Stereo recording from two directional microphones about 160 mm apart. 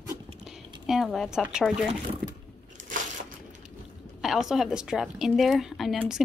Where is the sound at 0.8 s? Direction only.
Centre (ahead or behind).